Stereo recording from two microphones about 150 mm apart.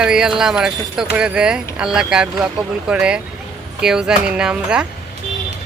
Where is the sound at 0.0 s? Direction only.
5° right (ahead or behind).